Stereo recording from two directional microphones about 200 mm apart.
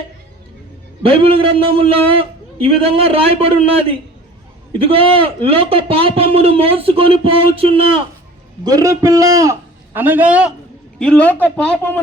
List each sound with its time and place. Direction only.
1.0 s a man's voice: 30° right (ahead or behind)
4.9 s a man's voice: 30° right (ahead or behind)
8.6 s a man's voice: 15° right (ahead or behind)
11.0 s a man's voice: 5° left (ahead or behind)